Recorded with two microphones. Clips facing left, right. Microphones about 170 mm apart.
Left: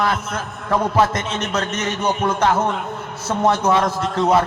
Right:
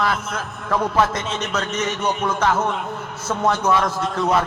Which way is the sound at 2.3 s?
15° left (ahead or behind).